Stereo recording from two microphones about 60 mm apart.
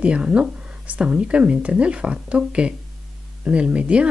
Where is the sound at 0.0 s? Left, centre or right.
Centre.